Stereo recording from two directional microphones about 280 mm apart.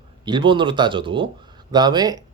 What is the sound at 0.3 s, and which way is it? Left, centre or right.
Speech, centre.